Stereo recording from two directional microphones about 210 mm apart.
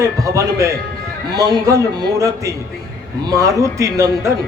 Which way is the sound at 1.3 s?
20° right (ahead or behind).